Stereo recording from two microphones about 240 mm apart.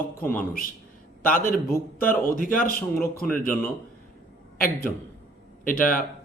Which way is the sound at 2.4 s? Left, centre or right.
Left.